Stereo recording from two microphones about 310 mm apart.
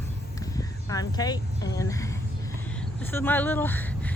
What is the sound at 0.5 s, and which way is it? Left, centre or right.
Speech, centre.